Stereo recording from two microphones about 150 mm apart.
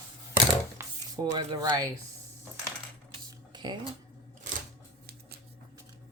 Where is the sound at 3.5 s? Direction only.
30° right (ahead or behind).